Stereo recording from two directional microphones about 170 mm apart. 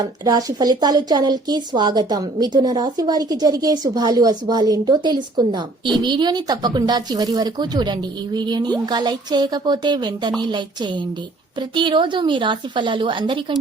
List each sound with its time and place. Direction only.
0.0 s a woman's voice: 20° right (ahead or behind)